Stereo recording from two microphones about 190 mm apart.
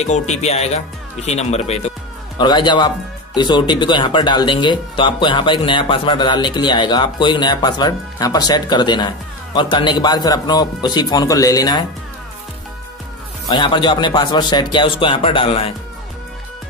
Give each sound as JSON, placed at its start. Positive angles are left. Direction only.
{"t": 0.0, "sound": "speech", "side_deg": 35}
{"t": 2.3, "sound": "speech", "side_deg": 20}
{"t": 13.5, "sound": "speech", "side_deg": 25}